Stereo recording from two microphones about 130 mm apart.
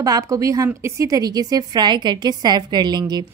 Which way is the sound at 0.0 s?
25° right (ahead or behind).